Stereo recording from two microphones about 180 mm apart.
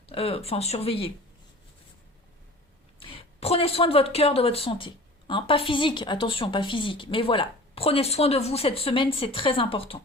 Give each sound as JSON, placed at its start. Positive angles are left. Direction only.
{"t": 0.1, "sound": "speech", "side_deg": 30}
{"t": 3.0, "sound": "speech", "side_deg": 30}